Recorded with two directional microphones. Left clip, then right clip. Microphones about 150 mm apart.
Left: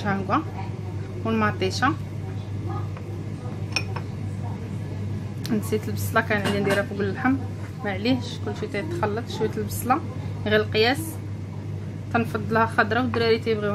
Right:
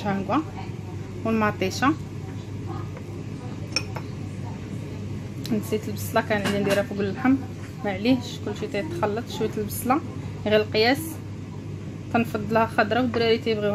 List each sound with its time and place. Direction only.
0.0 s speech: 15° right (ahead or behind)
1.2 s a woman's voice: 35° right (ahead or behind)
5.7 s speech: 15° right (ahead or behind)
7.0 s a woman's voice: 30° right (ahead or behind)
12.1 s a woman's voice: 25° right (ahead or behind)